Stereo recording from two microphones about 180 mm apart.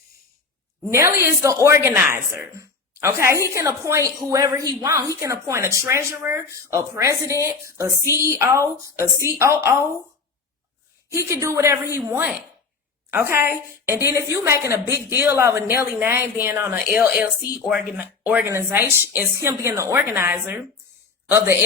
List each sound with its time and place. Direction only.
0.9 s a woman's voice: 15° right (ahead or behind)
11.1 s a woman's voice: 15° right (ahead or behind)